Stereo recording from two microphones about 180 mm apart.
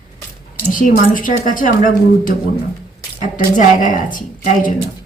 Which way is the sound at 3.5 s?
45° left (ahead or behind).